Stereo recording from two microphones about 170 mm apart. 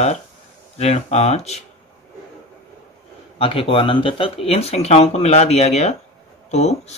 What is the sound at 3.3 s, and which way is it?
Speech, 35° left (ahead or behind).